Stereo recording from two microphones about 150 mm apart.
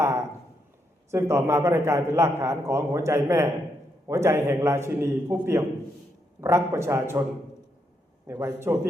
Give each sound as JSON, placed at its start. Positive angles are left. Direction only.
{"t": 0.0, "sound": "a sound", "side_deg": -20}
{"t": 1.1, "sound": "a man's voice", "side_deg": -20}
{"t": 8.3, "sound": "a man's voice", "side_deg": -15}